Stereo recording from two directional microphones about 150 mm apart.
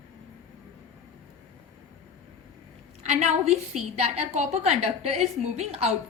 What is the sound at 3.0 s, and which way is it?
A woman's voice, 50° right (ahead or behind).